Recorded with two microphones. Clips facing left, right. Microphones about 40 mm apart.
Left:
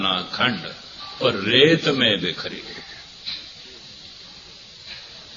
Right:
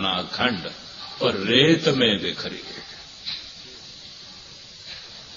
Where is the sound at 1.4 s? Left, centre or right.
Centre.